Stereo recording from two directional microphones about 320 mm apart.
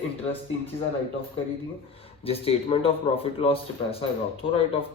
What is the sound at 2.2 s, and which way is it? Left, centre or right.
Speech, centre.